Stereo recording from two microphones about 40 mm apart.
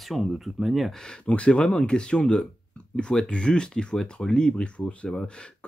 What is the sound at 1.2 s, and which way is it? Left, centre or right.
Speech, left.